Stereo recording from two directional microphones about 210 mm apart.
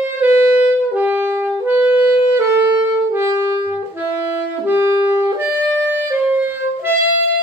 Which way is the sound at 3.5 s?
30° left (ahead or behind).